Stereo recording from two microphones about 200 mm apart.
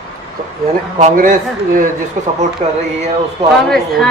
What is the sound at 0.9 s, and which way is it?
Speech, 40° right (ahead or behind).